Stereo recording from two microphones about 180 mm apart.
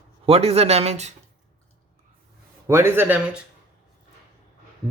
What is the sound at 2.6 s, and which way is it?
Speech, 15° right (ahead or behind).